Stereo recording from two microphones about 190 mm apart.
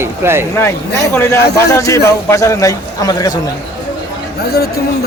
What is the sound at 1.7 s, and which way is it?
A man's voice, 15° left (ahead or behind).